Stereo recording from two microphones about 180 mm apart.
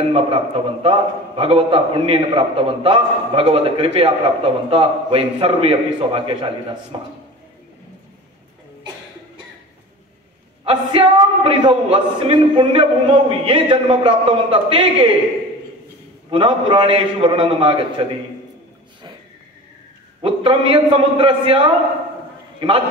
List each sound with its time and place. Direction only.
0.1 s a man's voice: 30° right (ahead or behind)
10.6 s a man's voice: 30° right (ahead or behind)
16.3 s a man's voice: 25° right (ahead or behind)
20.2 s a man's voice: 30° right (ahead or behind)